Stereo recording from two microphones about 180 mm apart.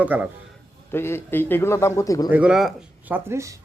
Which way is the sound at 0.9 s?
15° left (ahead or behind).